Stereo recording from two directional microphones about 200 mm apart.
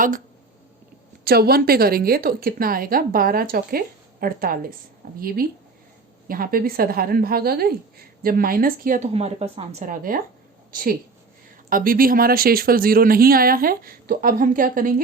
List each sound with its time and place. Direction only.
1.2 s a woman's voice: 50° right (ahead or behind)
9.1 s a woman's voice: 30° right (ahead or behind)